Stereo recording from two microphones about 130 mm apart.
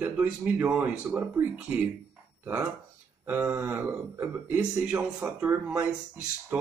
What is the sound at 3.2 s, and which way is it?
Speech, 15° right (ahead or behind).